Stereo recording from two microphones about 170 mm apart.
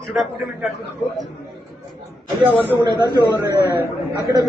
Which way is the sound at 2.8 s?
25° right (ahead or behind).